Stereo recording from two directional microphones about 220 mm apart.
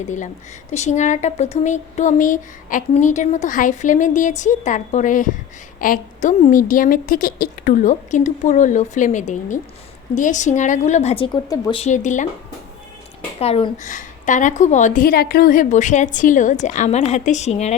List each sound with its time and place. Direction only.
0.7 s speech: 30° left (ahead or behind); by 11.8 s 15° left (ahead or behind)
11.8 s speech: 35° left (ahead or behind)
13.4 s speech: 30° left (ahead or behind)